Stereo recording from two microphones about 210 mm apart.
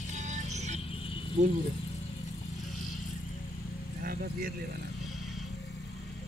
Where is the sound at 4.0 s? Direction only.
45° right (ahead or behind).